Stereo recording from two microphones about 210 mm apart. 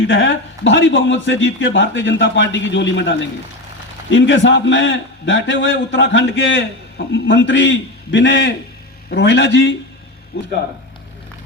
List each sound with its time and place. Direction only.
0.0 s a man's voice: 60° left (ahead or behind)
10.3 s speech: 45° left (ahead or behind)